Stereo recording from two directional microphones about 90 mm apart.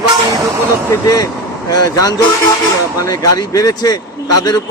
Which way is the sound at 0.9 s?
40° left (ahead or behind).